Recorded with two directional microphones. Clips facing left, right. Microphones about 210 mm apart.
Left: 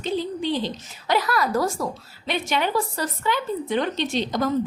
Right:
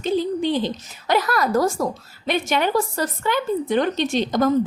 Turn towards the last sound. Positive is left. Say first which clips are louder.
# right 4 dB
turn(degrees=-45)  # may be behind; listen again after turning